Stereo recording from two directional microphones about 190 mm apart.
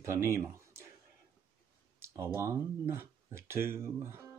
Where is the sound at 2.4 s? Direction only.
15° right (ahead or behind).